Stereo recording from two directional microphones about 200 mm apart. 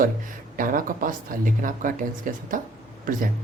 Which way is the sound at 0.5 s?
45° right (ahead or behind).